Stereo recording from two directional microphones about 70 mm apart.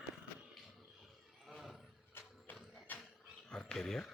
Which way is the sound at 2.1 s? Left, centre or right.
Left.